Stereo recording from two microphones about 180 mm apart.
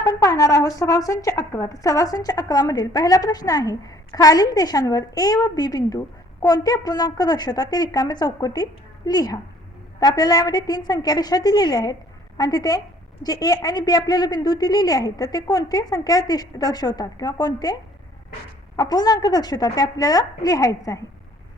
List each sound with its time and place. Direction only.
0.0 s a woman's voice: 20° left (ahead or behind)
18.8 s a woman's voice: 20° left (ahead or behind)